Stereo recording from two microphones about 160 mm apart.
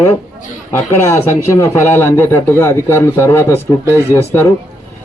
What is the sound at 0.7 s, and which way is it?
Speech, 15° left (ahead or behind).